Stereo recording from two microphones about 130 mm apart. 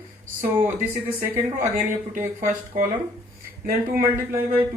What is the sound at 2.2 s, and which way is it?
Speech, 85° right.